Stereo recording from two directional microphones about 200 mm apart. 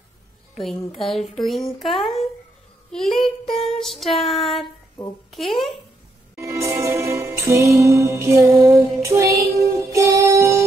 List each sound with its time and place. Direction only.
0.6 s speech: centre (ahead or behind)
6.3 s music: 15° right (ahead or behind)